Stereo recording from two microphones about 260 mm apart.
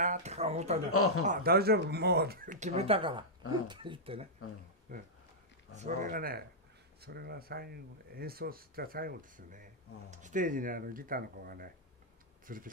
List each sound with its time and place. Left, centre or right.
0.0 s speech: right
0.9 s speech: left
1.2 s speech: right
5.8 s speech: right